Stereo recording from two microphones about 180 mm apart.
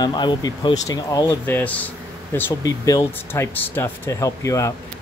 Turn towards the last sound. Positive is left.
turn(degrees=15)  # may be behind; listen again after turning